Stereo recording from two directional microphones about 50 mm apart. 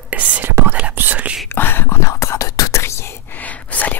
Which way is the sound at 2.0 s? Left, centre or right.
Left.